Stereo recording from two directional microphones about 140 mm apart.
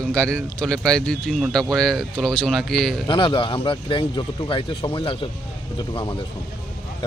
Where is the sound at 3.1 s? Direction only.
35° left (ahead or behind).